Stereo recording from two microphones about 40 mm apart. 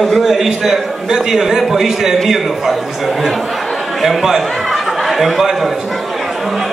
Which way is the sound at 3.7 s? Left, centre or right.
Centre.